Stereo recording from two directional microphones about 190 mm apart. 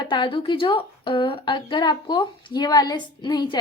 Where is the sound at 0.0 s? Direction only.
25° left (ahead or behind).